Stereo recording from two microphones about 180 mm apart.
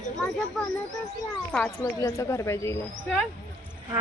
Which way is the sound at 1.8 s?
20° left (ahead or behind).